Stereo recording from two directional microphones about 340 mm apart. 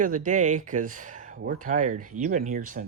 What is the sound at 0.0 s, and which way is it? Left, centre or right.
Speech, right.